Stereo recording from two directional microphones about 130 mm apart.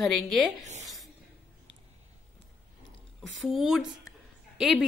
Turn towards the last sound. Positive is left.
turn(degrees=0)  # may be behind; listen again after turning